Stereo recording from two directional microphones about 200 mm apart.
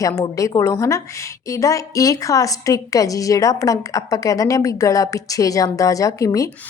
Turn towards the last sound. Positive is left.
turn(degrees=15)  # may be behind; listen again after turning